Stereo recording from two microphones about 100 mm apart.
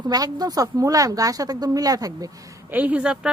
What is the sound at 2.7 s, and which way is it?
Speech, 15° right (ahead or behind).